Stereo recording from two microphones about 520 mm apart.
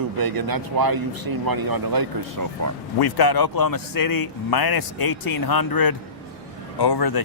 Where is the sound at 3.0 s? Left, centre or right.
Left.